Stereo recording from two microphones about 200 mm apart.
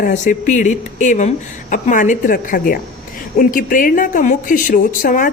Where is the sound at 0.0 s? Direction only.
40° left (ahead or behind).